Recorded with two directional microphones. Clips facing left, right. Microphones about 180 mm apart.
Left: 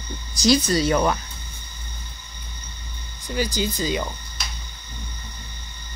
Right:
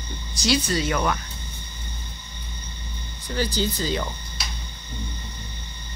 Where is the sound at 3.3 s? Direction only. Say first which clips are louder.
Even; 15° left (ahead or behind).